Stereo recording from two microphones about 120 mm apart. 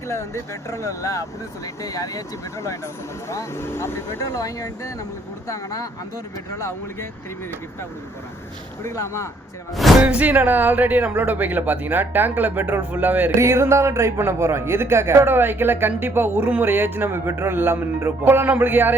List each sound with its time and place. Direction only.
0.1 s speech: 25° left (ahead or behind)
8.8 s speech: 25° left (ahead or behind)
10.0 s speech: 10° right (ahead or behind)